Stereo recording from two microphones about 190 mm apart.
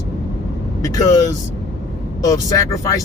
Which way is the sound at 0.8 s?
20° left (ahead or behind).